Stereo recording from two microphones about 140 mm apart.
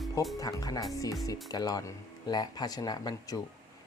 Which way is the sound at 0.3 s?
25° left (ahead or behind).